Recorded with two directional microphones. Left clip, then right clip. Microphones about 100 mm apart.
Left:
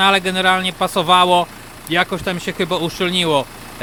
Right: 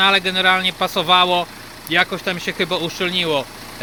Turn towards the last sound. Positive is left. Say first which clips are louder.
# left 2 dB
turn(degrees=55)  # may be behind; listen again after turning